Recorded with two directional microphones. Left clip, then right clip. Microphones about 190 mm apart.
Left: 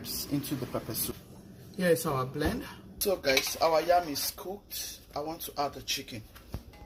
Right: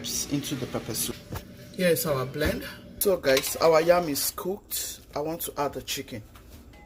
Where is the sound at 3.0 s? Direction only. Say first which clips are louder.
Right 5 dB; 35° right (ahead or behind).